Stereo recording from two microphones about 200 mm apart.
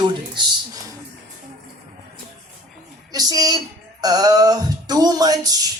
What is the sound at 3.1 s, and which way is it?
Speech, 20° right (ahead or behind).